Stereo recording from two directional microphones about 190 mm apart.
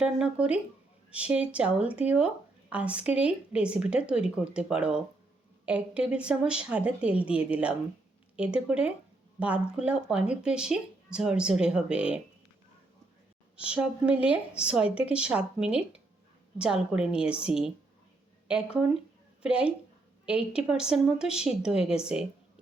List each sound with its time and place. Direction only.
0.0 s speech: 5° right (ahead or behind)
13.6 s a woman's voice: 5° right (ahead or behind)